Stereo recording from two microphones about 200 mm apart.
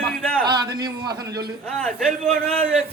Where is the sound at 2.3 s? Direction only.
30° right (ahead or behind).